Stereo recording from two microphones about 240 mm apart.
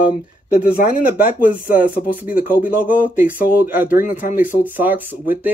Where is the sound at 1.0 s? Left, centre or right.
Left.